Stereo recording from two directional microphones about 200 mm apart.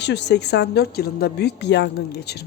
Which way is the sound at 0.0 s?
60° left (ahead or behind).